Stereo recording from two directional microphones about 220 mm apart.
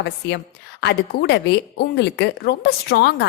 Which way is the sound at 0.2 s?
55° left (ahead or behind).